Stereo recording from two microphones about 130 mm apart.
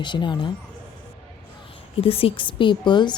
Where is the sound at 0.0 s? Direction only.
35° left (ahead or behind).